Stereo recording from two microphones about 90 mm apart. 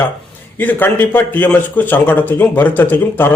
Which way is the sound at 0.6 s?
20° left (ahead or behind).